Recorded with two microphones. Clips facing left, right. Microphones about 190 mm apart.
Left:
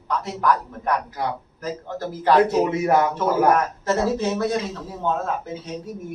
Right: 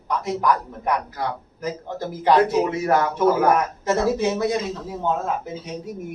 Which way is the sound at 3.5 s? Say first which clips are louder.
Even; 15° right (ahead or behind).